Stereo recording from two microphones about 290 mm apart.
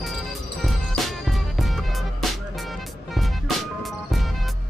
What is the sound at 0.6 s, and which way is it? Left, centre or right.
Music, centre.